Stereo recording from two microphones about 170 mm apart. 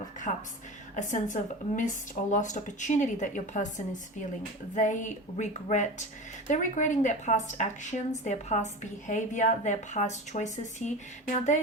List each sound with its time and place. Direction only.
0.3 s speech: 45° left (ahead or behind)